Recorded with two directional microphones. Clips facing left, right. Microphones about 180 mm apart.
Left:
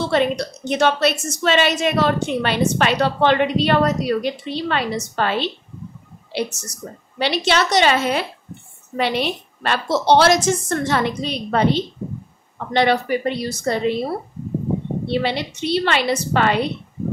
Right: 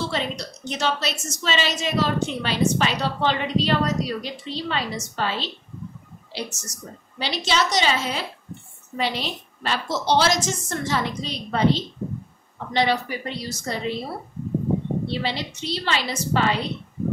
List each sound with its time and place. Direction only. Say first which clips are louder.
0.0 s a woman's voice: left 8 dB; 60° left (ahead or behind)